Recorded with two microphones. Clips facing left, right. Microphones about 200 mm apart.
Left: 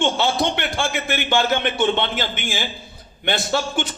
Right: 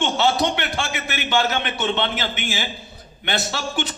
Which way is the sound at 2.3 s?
50° left (ahead or behind).